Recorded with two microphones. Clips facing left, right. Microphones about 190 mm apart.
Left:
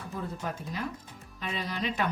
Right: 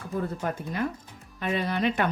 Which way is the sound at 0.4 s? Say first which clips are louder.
Right 6 dB; 55° right (ahead or behind).